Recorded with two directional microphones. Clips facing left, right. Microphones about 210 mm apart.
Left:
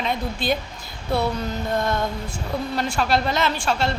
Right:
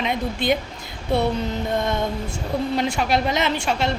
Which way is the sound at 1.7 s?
20° right (ahead or behind).